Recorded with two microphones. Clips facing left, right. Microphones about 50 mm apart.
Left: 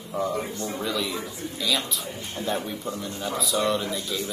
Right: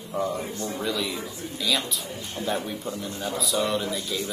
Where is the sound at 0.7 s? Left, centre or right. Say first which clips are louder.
Right 1 dB; centre.